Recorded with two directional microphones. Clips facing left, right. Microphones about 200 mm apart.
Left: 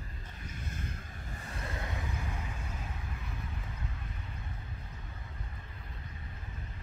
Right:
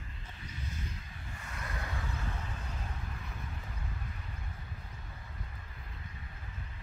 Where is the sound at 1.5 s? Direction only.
30° left (ahead or behind).